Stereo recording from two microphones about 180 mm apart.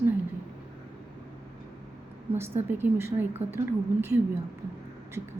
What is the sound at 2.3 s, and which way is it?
A woman's voice, 15° right (ahead or behind).